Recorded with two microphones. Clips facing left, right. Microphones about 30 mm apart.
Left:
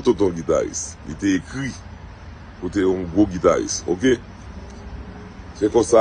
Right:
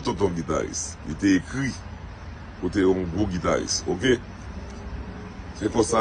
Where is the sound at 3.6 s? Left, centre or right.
Right.